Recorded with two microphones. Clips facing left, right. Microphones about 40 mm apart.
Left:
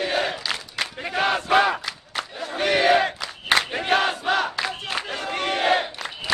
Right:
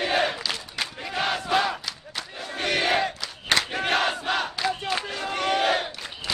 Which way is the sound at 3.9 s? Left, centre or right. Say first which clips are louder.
Left 4 dB; centre.